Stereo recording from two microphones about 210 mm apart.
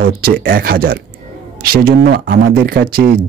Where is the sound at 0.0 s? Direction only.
50° right (ahead or behind).